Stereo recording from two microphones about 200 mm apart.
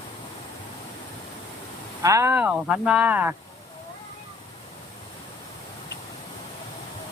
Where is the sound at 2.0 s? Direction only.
15° right (ahead or behind).